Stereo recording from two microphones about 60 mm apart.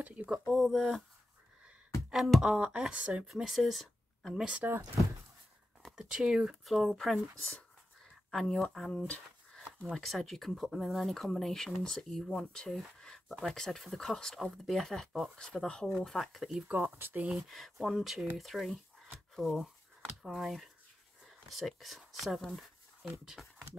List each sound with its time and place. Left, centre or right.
0.0 s speech: right
0.3 s speech: centre
2.0 s beatboxing: centre
2.4 s speech: centre
3.3 s speech: centre
5.9 s speech: centre
6.6 s speech: centre
8.3 s speech: centre
16.6 s speech: right
17.5 s speech: centre